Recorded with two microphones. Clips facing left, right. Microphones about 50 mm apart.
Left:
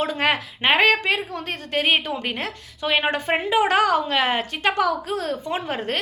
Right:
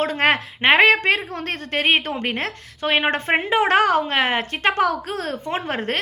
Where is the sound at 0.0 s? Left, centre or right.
Right.